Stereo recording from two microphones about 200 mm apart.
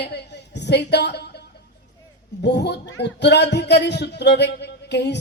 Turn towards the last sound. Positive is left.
turn(degrees=55)  # may be behind; listen again after turning